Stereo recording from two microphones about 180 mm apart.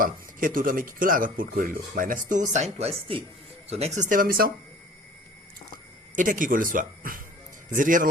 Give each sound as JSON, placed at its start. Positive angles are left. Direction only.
{"t": 0.0, "sound": "speech", "side_deg": -50}
{"t": 6.1, "sound": "speech", "side_deg": -50}